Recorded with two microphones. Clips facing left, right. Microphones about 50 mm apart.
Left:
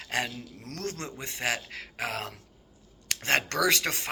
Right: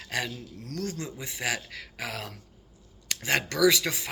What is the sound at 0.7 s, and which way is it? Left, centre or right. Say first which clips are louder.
Speech: right 2 dB; left.